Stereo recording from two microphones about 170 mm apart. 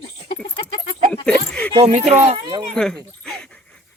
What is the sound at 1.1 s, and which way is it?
Speech, 5° left (ahead or behind).